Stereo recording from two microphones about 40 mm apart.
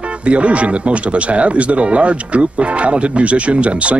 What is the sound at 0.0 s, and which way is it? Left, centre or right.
Speech, right.